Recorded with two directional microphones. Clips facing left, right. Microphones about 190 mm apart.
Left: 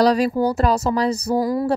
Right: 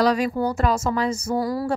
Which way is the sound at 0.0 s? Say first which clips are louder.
Left 4 dB; 35° left (ahead or behind).